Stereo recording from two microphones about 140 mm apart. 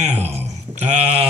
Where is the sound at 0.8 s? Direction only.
50° right (ahead or behind).